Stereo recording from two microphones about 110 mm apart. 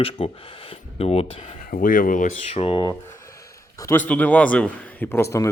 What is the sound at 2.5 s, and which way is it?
Speech, 55° left (ahead or behind).